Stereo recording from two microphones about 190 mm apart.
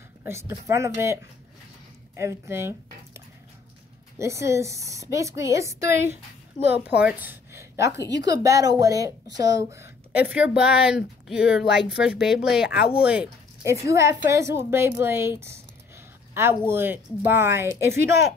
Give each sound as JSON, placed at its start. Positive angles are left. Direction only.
{"t": 0.2, "sound": "a woman's voice", "side_deg": -15}
{"t": 4.2, "sound": "a woman's voice", "side_deg": -15}